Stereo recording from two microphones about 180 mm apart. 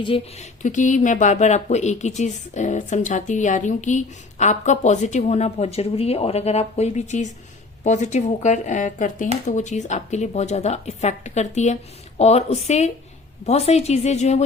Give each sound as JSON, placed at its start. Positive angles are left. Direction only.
{"t": 0.0, "sound": "speech", "side_deg": 30}
{"t": 0.6, "sound": "speech", "side_deg": 45}